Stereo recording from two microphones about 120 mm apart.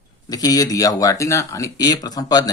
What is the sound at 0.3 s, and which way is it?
Speech, 30° left (ahead or behind).